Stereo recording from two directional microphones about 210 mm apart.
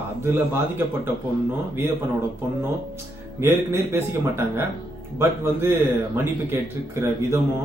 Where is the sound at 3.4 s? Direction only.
10° right (ahead or behind).